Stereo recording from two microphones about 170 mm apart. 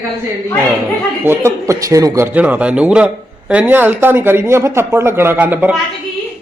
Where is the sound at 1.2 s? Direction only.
15° right (ahead or behind).